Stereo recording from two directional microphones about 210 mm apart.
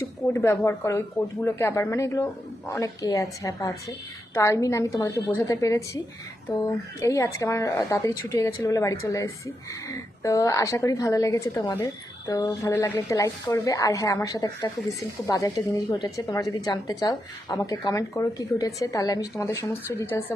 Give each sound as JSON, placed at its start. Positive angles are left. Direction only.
{"t": 0.0, "sound": "a woman's voice", "side_deg": 15}